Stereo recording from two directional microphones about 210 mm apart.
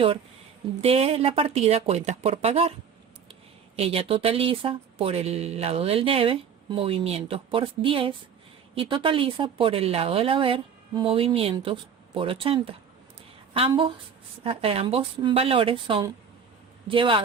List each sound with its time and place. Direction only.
0.8 s speech: 30° right (ahead or behind)
3.8 s a woman's voice: 25° right (ahead or behind)